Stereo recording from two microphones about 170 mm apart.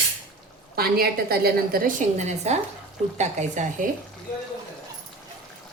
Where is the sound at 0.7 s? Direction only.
65° right (ahead or behind); by 3.6 s 45° right (ahead or behind).